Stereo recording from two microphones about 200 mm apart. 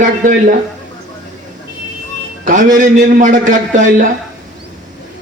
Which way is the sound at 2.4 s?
40° right (ahead or behind).